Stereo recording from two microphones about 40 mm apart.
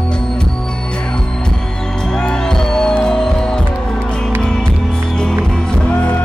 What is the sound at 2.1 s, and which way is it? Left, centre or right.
Music, left.